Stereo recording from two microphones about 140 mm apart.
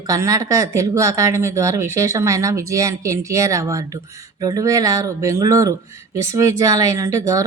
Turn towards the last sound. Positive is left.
turn(degrees=-25)  # may be behind; listen again after turning